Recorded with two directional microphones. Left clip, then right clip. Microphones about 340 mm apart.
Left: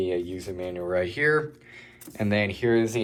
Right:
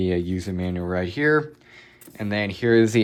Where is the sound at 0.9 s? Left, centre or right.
Centre.